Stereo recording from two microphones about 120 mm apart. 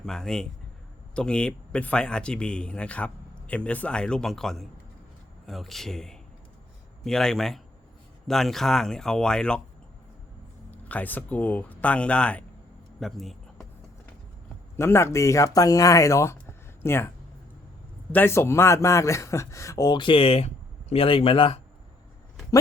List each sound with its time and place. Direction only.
0.0 s speech: 5° left (ahead or behind)
10.7 s speech: 15° left (ahead or behind)
13.0 s a sound: centre (ahead or behind)
14.8 s speech: 20° left (ahead or behind)
18.1 s speech: 20° left (ahead or behind); by 21.6 s 50° left (ahead or behind)